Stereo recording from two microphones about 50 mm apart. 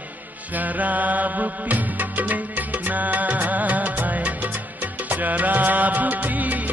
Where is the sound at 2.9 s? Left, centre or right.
Right.